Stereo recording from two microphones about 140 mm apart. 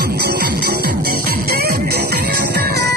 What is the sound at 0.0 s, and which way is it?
Music, 90° right.